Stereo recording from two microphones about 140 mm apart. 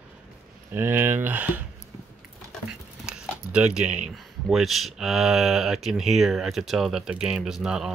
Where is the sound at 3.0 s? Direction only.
5° right (ahead or behind).